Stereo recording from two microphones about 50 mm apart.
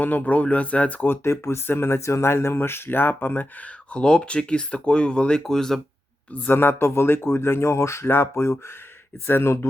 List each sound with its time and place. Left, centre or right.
0.0 s speech: left
1.0 s speech: left
1.3 s speech: left
3.9 s speech: centre
5.5 s speech: centre
6.5 s speech: left